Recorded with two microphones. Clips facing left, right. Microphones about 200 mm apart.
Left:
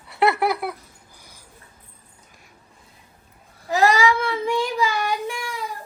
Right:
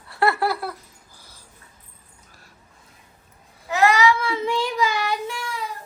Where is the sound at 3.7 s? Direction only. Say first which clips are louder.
Even; 35° left (ahead or behind).